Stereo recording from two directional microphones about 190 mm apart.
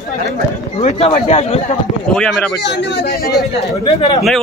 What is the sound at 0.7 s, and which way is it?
Speech, 35° left (ahead or behind).